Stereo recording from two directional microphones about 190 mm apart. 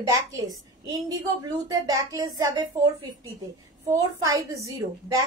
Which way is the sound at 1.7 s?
20° right (ahead or behind).